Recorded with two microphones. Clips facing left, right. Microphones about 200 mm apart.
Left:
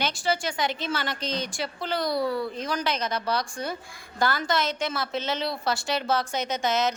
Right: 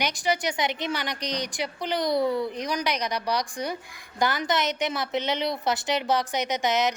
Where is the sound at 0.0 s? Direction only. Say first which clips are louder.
Right 1 dB; 15° right (ahead or behind).